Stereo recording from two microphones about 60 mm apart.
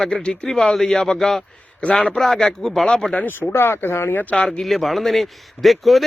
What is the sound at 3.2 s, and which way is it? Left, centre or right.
Speech, left.